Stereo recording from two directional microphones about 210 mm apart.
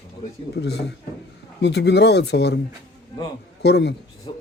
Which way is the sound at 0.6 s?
55° left (ahead or behind).